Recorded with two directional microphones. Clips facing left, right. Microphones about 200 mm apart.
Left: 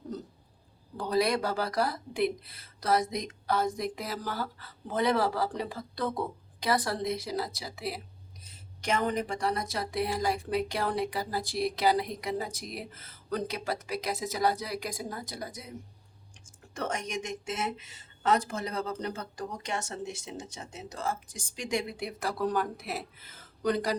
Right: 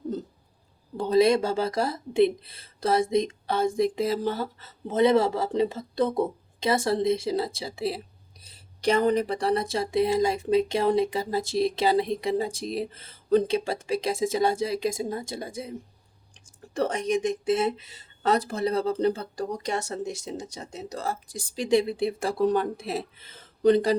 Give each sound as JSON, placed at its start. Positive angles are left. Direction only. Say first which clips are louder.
{"t": 0.9, "sound": "speech", "louder": "right 7 dB", "side_deg": -25}
{"t": 16.7, "sound": "speech", "louder": "right 9 dB", "side_deg": -35}